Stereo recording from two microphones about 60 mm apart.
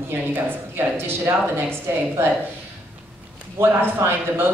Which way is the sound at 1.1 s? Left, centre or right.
Right.